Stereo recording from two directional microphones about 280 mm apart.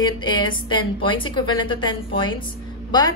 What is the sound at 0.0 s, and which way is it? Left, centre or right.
A woman's voice, centre.